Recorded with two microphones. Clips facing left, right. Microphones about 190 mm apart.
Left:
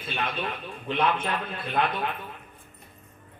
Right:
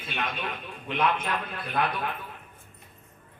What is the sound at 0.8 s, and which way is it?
Speech, 30° left (ahead or behind).